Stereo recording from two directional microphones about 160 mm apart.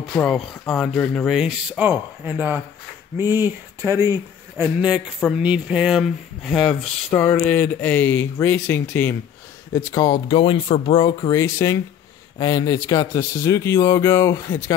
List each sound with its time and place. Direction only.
0.1 s speech: 5° left (ahead or behind); by 4.6 s 15° right (ahead or behind)
4.7 s speech: 5° right (ahead or behind)
7.1 s speech: 20° left (ahead or behind)
9.9 s speech: 30° left (ahead or behind)